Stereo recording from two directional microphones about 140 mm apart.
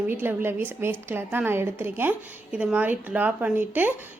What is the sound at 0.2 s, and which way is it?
A woman's voice, 15° right (ahead or behind).